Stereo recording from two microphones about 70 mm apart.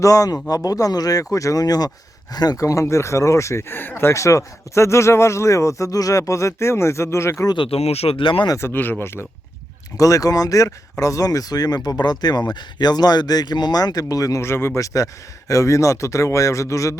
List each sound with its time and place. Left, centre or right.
0.0 s speech: left
2.6 s speech: left
8.5 s speech: left
10.0 s speech: left
14.4 s speech: left
14.8 s speech: left